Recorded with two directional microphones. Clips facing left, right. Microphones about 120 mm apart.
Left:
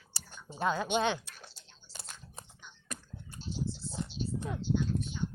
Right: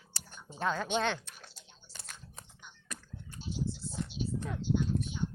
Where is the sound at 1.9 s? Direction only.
15° left (ahead or behind).